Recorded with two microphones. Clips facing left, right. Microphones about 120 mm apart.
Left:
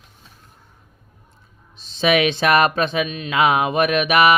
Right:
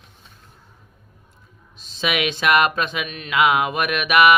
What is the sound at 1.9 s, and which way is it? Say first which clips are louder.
Speech: left 6 dB; 30° left (ahead or behind).